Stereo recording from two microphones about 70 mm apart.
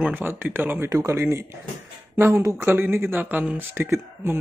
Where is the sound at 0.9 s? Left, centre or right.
Right.